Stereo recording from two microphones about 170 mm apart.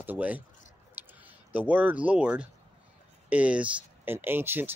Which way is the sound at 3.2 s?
10° right (ahead or behind).